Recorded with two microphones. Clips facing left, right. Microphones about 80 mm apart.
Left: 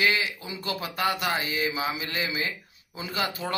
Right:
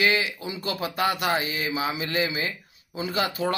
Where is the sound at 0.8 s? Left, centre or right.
Right.